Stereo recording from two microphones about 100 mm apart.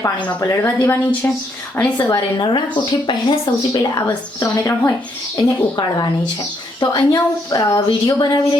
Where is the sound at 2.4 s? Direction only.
50° left (ahead or behind).